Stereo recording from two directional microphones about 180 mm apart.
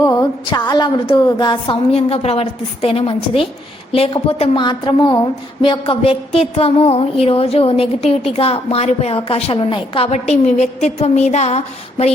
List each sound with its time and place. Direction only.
0.0 s a woman's voice: 20° left (ahead or behind); by 12.1 s 35° left (ahead or behind)